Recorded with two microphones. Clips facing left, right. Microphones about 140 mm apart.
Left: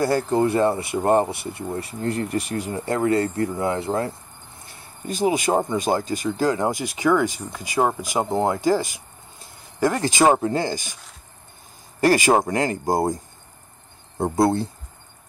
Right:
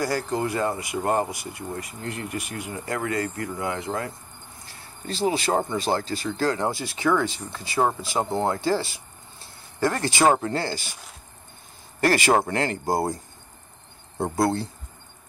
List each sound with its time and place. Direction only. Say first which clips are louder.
0.0 s speech: left 6 dB; 25° left (ahead or behind)
4.6 s speech: left 3 dB; 20° left (ahead or behind)
12.0 s speech: left 3 dB; 15° left (ahead or behind)
14.2 s speech: left 4 dB; 20° left (ahead or behind)